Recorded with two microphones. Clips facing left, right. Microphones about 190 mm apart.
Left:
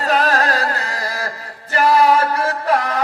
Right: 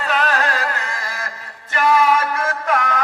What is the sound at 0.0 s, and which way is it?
Music, 40° left (ahead or behind).